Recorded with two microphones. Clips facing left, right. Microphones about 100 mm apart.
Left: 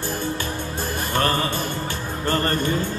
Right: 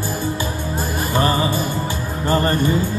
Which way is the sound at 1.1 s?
10° right (ahead or behind).